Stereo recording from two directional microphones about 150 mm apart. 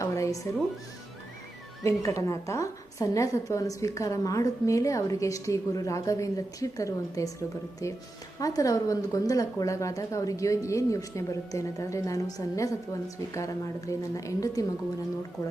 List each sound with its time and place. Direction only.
0.0 s speech: 20° left (ahead or behind)
1.8 s a woman's voice: 20° left (ahead or behind)